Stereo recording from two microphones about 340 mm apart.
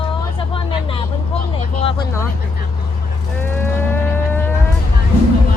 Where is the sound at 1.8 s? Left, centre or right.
Centre.